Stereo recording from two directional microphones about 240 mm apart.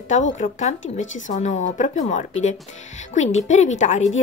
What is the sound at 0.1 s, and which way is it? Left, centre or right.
Speech, left.